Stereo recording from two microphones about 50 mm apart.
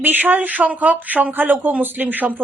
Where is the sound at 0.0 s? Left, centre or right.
Right.